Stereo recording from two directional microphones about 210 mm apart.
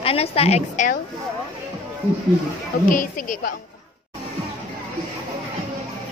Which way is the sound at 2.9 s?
40° left (ahead or behind).